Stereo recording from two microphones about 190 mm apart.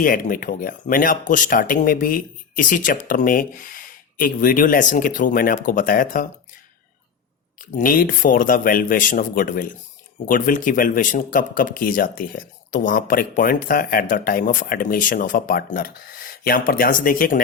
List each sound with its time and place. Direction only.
0.0 s speech: 45° left (ahead or behind)
7.6 s speech: 45° left (ahead or behind)